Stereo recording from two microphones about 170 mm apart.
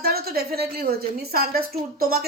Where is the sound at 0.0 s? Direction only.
65° right (ahead or behind).